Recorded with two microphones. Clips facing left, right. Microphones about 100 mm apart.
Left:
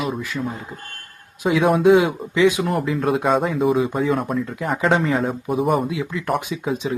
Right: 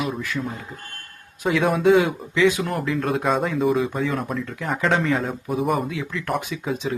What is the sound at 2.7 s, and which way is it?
Speech, centre (ahead or behind).